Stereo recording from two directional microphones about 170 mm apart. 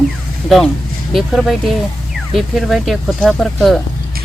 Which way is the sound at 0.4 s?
Centre (ahead or behind).